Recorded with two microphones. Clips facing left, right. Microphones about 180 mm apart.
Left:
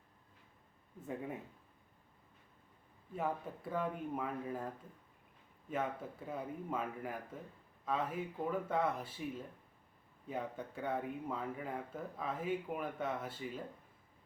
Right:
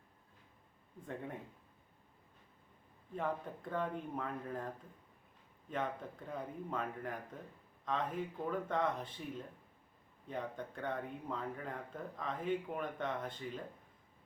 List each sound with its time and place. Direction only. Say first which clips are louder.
0.9 s speech: left 2 dB; 5° left (ahead or behind)
3.2 s speech: even; 5° left (ahead or behind)
5.7 s speech: left 1 dB; 5° left (ahead or behind)